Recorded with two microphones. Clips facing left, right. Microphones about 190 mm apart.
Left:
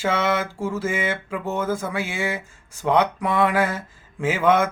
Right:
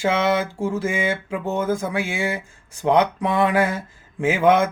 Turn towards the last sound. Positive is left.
turn(degrees=-15)  # may be behind; listen again after turning